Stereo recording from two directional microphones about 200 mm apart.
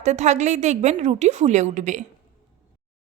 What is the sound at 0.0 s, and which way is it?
A woman's voice, 35° right (ahead or behind).